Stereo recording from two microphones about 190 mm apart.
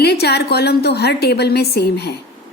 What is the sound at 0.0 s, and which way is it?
A woman's voice, 60° left (ahead or behind).